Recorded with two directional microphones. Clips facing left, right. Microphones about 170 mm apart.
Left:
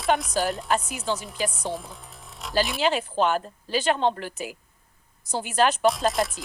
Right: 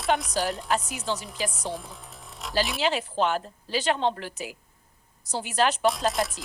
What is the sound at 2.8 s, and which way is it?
Speech, 50° left (ahead or behind).